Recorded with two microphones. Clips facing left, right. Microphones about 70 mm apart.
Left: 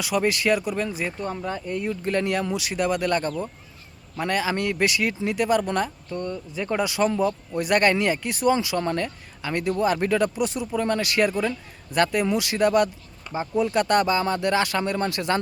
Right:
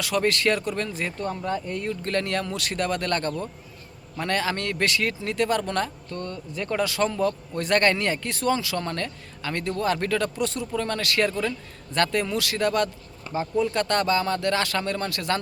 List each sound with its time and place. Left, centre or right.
0.0 s speech: centre